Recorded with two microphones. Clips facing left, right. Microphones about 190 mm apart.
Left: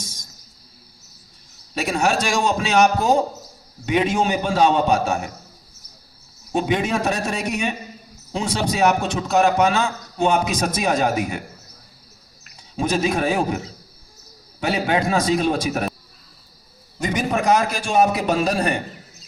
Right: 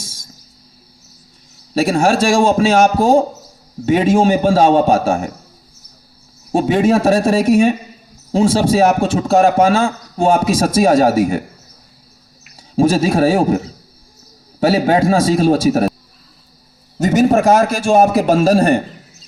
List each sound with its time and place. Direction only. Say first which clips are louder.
0.0 s music: right 1 dB; 10° right (ahead or behind)
1.8 s a man's voice: right 7 dB; 45° right (ahead or behind)
6.5 s a man's voice: right 8 dB; 40° right (ahead or behind)
12.5 s a man's voice: right 9 dB; 45° right (ahead or behind)
17.0 s a man's voice: right 10 dB; 45° right (ahead or behind)